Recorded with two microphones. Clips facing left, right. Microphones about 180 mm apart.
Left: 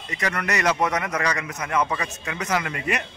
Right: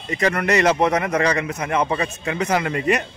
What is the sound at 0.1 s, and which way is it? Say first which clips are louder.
A man's voice: right 7 dB; 30° right (ahead or behind).